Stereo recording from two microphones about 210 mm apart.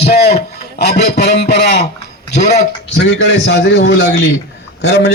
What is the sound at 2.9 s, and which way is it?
A man's voice, 55° left (ahead or behind).